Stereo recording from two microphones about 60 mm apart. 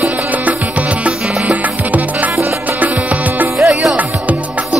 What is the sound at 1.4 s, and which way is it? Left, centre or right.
Music, right.